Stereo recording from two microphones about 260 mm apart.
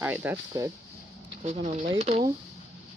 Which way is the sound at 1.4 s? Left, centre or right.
Right.